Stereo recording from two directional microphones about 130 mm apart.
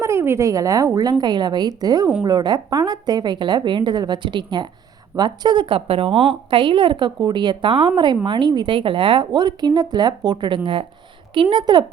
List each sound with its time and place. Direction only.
0.0 s a woman's voice: 20° right (ahead or behind)